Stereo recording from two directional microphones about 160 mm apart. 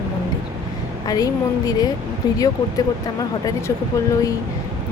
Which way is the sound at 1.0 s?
25° left (ahead or behind).